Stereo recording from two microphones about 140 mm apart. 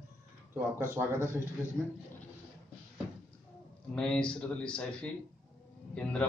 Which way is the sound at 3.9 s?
5° left (ahead or behind).